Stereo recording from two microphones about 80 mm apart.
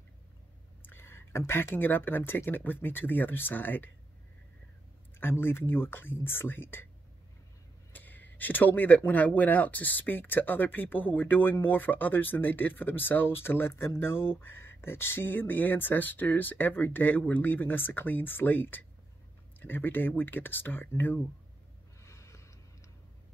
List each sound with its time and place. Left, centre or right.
0.8 s speech: left
5.2 s speech: left
7.9 s speech: left
22.0 s a sound: left